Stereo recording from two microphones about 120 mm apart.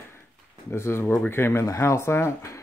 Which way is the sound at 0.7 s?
20° left (ahead or behind).